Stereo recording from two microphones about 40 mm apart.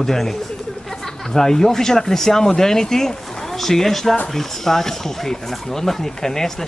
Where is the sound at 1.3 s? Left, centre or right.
Centre.